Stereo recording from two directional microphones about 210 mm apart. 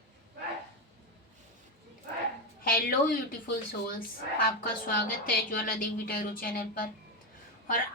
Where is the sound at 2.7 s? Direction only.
45° left (ahead or behind).